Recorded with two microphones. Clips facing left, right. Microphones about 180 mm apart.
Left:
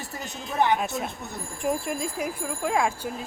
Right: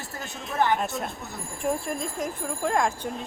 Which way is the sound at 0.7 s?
Centre (ahead or behind).